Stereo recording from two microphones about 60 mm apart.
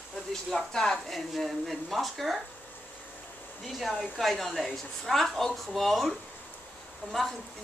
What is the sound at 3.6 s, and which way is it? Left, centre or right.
A woman's voice, centre.